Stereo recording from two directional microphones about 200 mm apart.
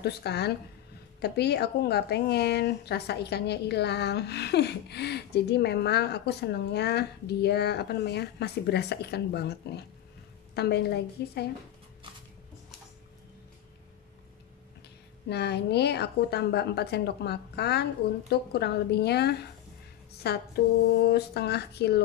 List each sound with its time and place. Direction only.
0.0 s a woman's voice: 55° left (ahead or behind)
15.2 s a woman's voice: 55° left (ahead or behind)